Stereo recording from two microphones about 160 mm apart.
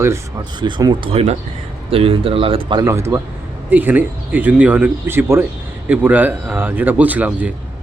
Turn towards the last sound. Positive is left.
turn(degrees=-10)  # may be behind; listen again after turning